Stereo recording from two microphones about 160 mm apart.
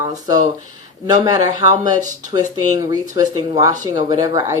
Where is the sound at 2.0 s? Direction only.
50° right (ahead or behind).